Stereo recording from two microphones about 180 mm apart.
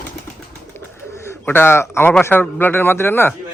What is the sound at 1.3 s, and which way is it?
A man's voice, 10° left (ahead or behind).